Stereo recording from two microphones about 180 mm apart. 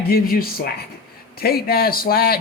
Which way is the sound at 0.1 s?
55° left (ahead or behind).